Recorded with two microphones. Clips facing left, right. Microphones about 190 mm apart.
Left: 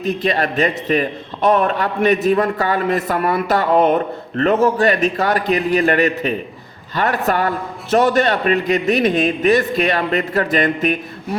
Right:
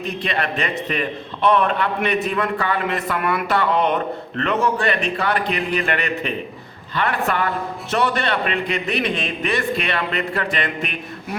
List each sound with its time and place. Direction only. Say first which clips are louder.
0.0 s a man's voice: left 6 dB; 40° left (ahead or behind)